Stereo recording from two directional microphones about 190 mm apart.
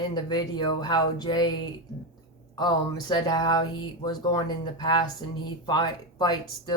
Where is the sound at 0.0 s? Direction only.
20° left (ahead or behind).